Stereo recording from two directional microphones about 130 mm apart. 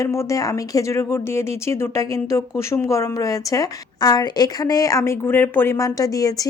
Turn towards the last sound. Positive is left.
turn(degrees=25)  # may be behind; listen again after turning